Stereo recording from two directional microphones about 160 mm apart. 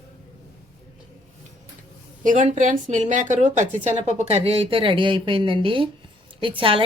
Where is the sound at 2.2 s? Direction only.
50° right (ahead or behind).